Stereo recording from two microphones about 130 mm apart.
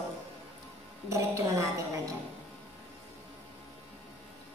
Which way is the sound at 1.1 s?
25° right (ahead or behind).